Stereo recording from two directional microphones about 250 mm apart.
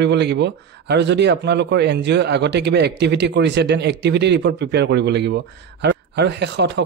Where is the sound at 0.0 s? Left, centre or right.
Right.